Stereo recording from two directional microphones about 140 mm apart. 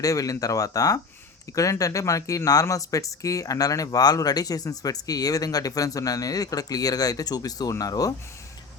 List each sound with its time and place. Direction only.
0.0 s speech: 25° left (ahead or behind)